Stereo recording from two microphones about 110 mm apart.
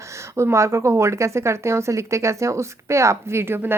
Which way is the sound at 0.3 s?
25° right (ahead or behind).